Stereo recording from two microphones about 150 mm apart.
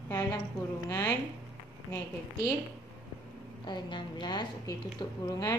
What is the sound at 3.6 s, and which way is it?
A woman's voice, 30° left (ahead or behind).